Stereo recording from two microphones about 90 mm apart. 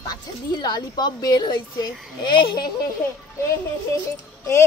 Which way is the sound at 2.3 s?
65° left (ahead or behind).